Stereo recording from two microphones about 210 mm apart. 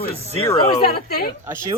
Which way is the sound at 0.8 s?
45° left (ahead or behind).